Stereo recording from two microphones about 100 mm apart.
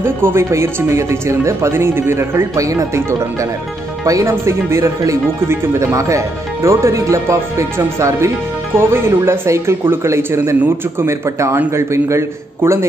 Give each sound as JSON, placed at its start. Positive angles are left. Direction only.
{"t": 0.0, "sound": "speech", "side_deg": -25}